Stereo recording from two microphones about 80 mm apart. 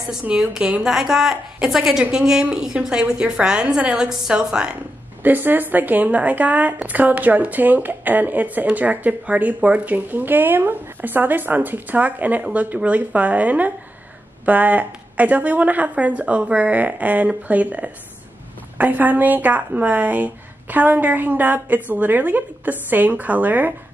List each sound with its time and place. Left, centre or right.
0.2 s a woman's voice: centre
5.2 s a woman's voice: right